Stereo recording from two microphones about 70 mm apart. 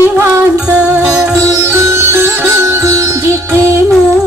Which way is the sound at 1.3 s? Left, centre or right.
Right.